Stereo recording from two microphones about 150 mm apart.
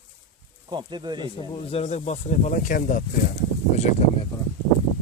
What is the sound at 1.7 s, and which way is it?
Speech, 50° left (ahead or behind).